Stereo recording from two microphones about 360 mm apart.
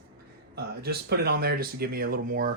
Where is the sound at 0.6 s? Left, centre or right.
Right.